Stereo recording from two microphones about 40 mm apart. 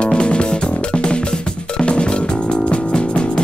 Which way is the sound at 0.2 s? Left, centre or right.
Left.